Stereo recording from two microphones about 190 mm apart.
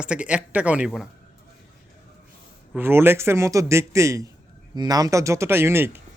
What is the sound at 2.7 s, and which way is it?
Speech, 10° right (ahead or behind).